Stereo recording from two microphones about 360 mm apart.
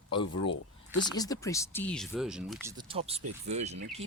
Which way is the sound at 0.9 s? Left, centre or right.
Centre.